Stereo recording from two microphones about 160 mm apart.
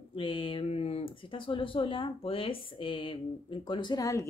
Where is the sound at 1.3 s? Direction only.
35° left (ahead or behind).